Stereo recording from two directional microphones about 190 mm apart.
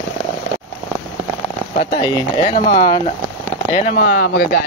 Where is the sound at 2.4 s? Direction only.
30° left (ahead or behind).